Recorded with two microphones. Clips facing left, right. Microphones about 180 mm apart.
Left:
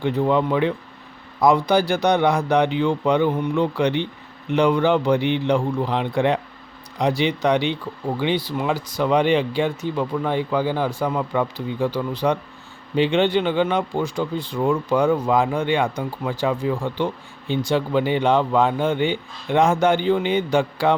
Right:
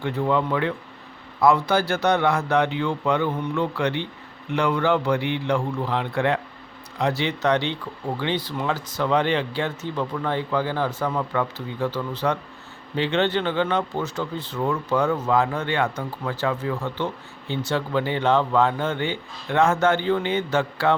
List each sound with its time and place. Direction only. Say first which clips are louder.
0.0 s speech: left 3 dB; 15° left (ahead or behind)